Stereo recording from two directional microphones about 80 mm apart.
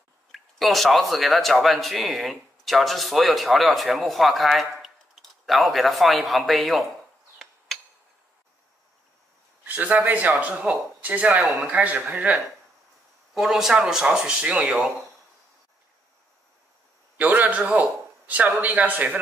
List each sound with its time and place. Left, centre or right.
0.3 s speech: centre
7.3 s hammer: centre
9.7 s speech: right
13.3 s speech: centre
17.2 s a man's voice: centre